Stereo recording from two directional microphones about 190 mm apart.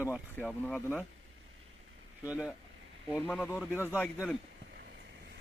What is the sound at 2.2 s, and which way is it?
Speech, 5° right (ahead or behind).